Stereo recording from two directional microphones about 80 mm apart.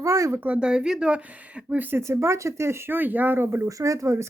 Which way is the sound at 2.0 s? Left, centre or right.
Right.